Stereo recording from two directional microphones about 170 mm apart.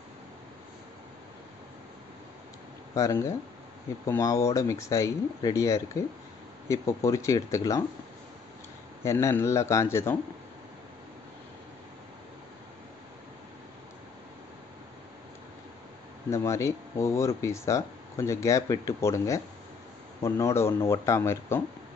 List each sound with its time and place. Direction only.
2.9 s speech: 20° left (ahead or behind)
9.0 s speech: 15° left (ahead or behind)
16.3 s speech: 15° left (ahead or behind)